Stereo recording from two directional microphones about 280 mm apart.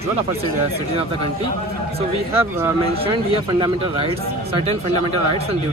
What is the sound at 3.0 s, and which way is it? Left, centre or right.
Speech, centre.